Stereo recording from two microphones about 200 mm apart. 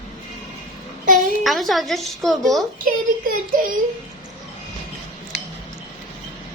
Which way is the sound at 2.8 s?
45° right (ahead or behind).